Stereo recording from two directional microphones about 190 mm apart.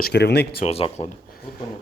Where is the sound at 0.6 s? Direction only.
35° left (ahead or behind).